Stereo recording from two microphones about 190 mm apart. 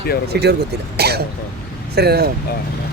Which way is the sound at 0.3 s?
60° right (ahead or behind).